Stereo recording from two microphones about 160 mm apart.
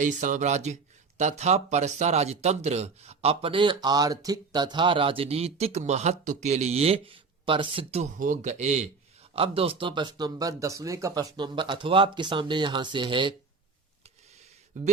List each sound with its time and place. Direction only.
0.0 s speech: 50° right (ahead or behind)
8.2 s speech: 50° right (ahead or behind); by 13.3 s 30° right (ahead or behind)
14.8 s speech: 50° right (ahead or behind)